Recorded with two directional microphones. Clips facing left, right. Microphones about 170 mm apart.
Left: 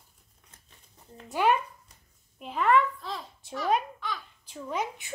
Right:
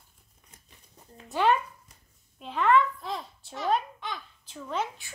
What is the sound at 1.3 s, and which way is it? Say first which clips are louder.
Speech: right 1 dB; 10° left (ahead or behind).